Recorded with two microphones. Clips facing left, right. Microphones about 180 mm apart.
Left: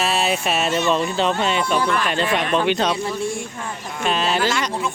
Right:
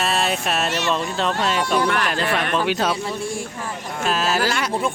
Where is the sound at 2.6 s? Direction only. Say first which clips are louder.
Left 2 dB; 5° right (ahead or behind).